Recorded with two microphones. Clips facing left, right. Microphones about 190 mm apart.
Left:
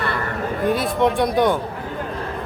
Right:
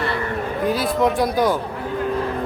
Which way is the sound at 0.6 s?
Centre (ahead or behind).